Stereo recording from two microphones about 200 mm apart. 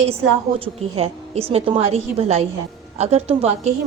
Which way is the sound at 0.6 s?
30° right (ahead or behind).